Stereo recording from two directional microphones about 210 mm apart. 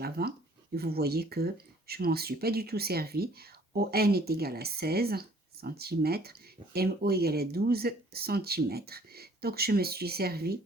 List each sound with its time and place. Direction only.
0.0 s speech: 50° right (ahead or behind)